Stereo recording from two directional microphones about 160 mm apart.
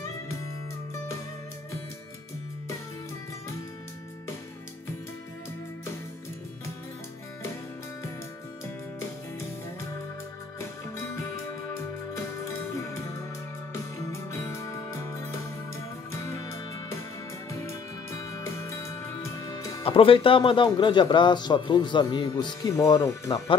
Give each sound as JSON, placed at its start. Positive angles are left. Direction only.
{"t": 12.7, "sound": "music", "side_deg": 20}
{"t": 14.3, "sound": "music", "side_deg": 15}
{"t": 19.5, "sound": "speech", "side_deg": 30}